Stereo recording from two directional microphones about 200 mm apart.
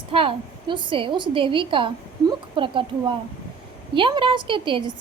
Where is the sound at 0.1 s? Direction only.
25° right (ahead or behind).